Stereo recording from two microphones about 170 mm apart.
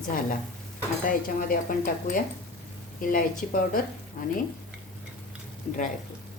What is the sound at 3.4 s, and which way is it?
Speech, 55° left (ahead or behind).